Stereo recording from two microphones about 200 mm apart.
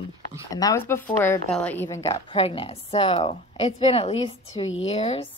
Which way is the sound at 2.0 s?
25° left (ahead or behind).